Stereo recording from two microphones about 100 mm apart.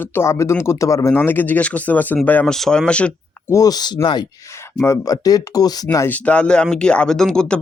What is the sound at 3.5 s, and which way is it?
Speech, 35° left (ahead or behind).